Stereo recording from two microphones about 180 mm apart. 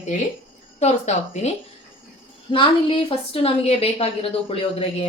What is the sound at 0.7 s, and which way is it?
Speech, 40° left (ahead or behind).